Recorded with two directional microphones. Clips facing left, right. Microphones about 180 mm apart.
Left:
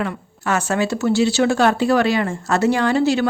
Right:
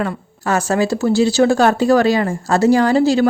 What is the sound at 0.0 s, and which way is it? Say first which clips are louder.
Speech: right 3 dB; 40° right (ahead or behind).